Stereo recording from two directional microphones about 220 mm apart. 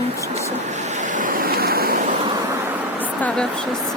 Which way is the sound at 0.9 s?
35° right (ahead or behind).